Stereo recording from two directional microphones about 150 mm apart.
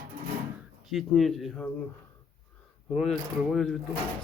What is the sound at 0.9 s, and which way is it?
Speech, centre (ahead or behind).